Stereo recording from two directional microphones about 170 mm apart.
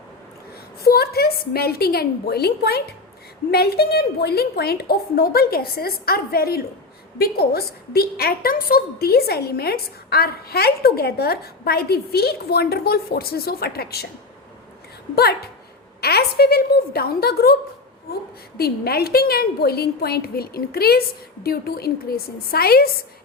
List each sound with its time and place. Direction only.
0.9 s a woman's voice: 65° left (ahead or behind)
15.1 s a woman's voice: 70° left (ahead or behind)